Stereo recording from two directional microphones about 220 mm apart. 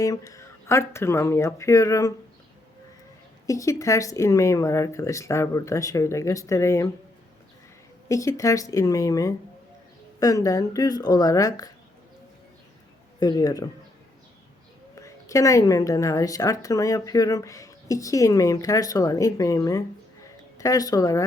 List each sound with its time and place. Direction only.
0.0 s speech: 15° left (ahead or behind)
3.4 s a woman's voice: 15° left (ahead or behind)
8.0 s a woman's voice: 15° left (ahead or behind)
13.1 s a woman's voice: 20° left (ahead or behind)
14.9 s a woman's voice: 15° left (ahead or behind)
20.2 s a sound: 15° left (ahead or behind)